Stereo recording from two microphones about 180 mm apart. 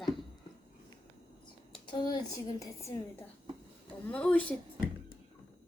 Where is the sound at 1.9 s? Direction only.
25° left (ahead or behind).